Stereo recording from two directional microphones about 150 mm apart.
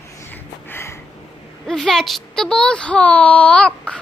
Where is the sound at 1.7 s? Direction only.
5° left (ahead or behind).